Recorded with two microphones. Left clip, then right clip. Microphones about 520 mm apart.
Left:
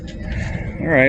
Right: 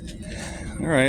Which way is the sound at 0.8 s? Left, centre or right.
Right.